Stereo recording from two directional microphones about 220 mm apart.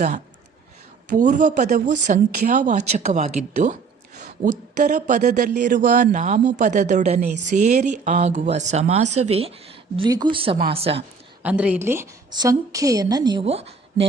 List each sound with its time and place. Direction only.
1.1 s speech: 35° right (ahead or behind)
10.0 s speech: 20° right (ahead or behind)
11.4 s a woman's voice: 5° right (ahead or behind); by 14.1 s 30° right (ahead or behind)